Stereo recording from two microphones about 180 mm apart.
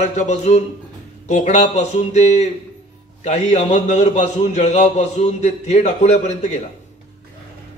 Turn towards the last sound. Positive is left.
turn(degrees=40)  # may be behind; listen again after turning